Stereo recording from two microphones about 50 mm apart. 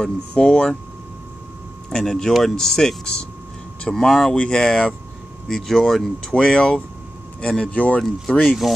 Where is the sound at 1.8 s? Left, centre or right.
Centre.